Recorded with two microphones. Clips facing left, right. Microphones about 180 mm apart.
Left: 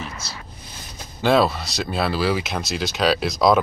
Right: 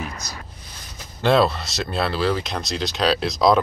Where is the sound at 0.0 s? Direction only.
15° right (ahead or behind).